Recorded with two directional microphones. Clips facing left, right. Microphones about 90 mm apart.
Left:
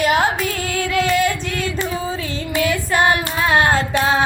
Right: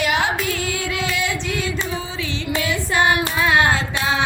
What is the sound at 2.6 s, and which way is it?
Child singing, 40° left (ahead or behind).